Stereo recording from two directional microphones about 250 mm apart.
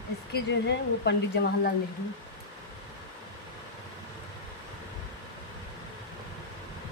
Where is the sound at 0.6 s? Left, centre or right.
Left.